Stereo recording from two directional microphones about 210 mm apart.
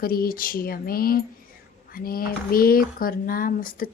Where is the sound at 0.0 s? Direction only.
45° left (ahead or behind).